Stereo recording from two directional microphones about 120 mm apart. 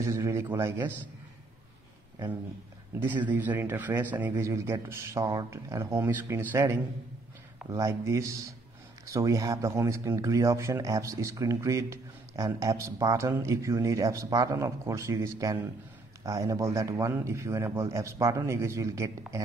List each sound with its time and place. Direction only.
0.0 s speech: 25° right (ahead or behind)
3.0 s speech: 15° right (ahead or behind)